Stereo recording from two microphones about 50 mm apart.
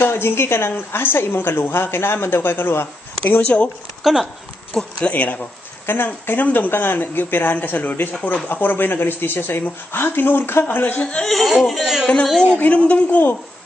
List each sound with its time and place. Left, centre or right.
0.0 s a woman's voice: left
3.3 s speech: left
4.0 s speech: centre
4.7 s speech: centre
5.1 s speech: left
5.9 s speech: left
6.7 s speech: left
8.5 s a woman's voice: left
11.1 s speech: centre
12.7 s a woman's voice: left